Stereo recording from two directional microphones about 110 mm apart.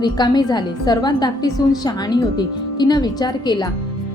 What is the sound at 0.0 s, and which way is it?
A woman's voice, 40° left (ahead or behind).